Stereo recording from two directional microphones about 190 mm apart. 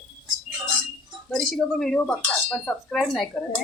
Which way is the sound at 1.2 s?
Centre (ahead or behind).